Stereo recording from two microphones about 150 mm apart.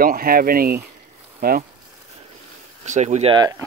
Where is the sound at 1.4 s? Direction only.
75° right (ahead or behind).